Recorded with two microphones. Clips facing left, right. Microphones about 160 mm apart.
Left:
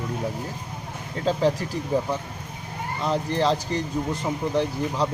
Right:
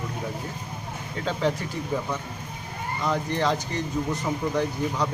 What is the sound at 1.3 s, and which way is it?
Speech, 35° left (ahead or behind).